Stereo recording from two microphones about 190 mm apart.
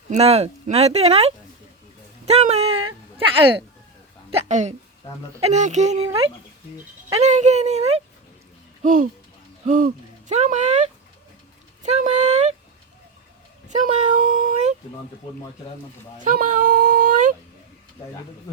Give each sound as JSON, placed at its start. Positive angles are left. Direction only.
{"t": 0.1, "sound": "a woman's voice", "side_deg": -35}
{"t": 7.1, "sound": "speech", "side_deg": -40}
{"t": 13.7, "sound": "speech", "side_deg": -40}
{"t": 16.2, "sound": "speech", "side_deg": -45}